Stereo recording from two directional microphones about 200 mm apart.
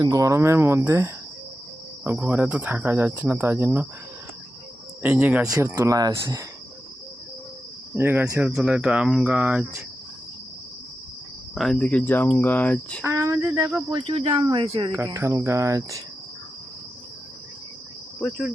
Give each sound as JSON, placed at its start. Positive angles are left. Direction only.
{"t": 0.0, "sound": "speech", "side_deg": -15}
{"t": 5.0, "sound": "speech", "side_deg": -5}
{"t": 7.9, "sound": "speech", "side_deg": -10}
{"t": 11.5, "sound": "cricket", "side_deg": 0}
{"t": 13.1, "sound": "speech", "side_deg": -15}
{"t": 14.1, "sound": "speech", "side_deg": -30}
{"t": 14.9, "sound": "speech", "side_deg": -15}
{"t": 18.2, "sound": "insect", "side_deg": 5}